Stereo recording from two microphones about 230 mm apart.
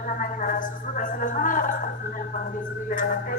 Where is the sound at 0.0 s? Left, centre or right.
Left.